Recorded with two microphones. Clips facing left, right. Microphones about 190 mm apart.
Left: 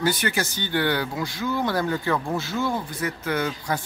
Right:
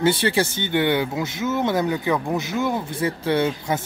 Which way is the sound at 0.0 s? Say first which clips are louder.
Right 5 dB; 30° right (ahead or behind).